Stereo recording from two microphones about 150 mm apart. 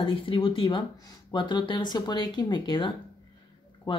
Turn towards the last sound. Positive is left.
turn(degrees=30)  # may be behind; listen again after turning